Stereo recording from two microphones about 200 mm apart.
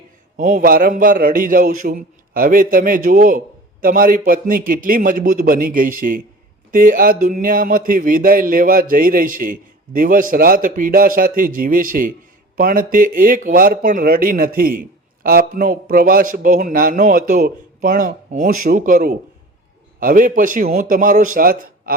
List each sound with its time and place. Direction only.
0.3 s speech: 40° right (ahead or behind)